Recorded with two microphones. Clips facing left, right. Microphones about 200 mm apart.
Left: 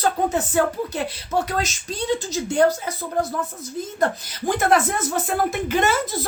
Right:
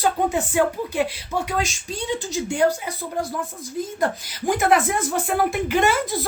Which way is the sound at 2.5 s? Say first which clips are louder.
Left 2 dB; 10° right (ahead or behind).